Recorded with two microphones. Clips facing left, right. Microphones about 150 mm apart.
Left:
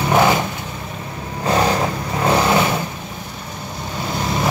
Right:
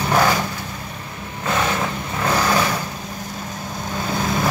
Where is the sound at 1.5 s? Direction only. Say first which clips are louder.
Left 4 dB; 35° left (ahead or behind).